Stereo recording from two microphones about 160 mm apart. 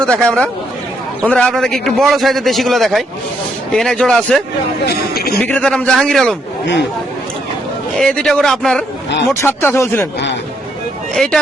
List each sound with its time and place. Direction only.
0.0 s a man's voice: 5° left (ahead or behind)
4.9 s speech: 75° left (ahead or behind)
5.4 s a man's voice: 5° left (ahead or behind)
7.9 s a man's voice: 5° left (ahead or behind)
9.3 s speech: 15° left (ahead or behind)
11.1 s speech: 5° left (ahead or behind)